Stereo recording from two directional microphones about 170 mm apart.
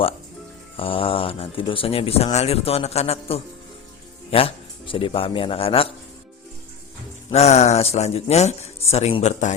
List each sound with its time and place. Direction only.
0.8 s a man's voice: 30° left (ahead or behind)
7.3 s speech: 40° left (ahead or behind)